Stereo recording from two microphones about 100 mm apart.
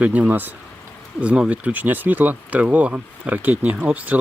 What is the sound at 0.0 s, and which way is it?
Speech, 15° right (ahead or behind).